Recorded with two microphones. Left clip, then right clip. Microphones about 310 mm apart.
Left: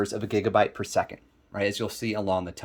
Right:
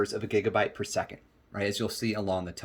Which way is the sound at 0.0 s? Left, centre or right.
Centre.